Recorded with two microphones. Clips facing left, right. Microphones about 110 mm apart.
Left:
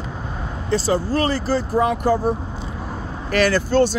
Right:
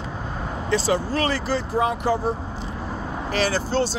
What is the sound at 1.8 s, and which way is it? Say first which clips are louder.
Speech: left 3 dB; 50° left (ahead or behind).